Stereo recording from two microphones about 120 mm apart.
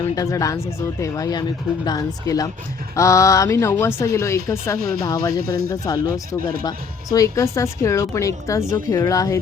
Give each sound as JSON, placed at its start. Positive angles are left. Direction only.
{"t": 0.0, "sound": "speech", "side_deg": 25}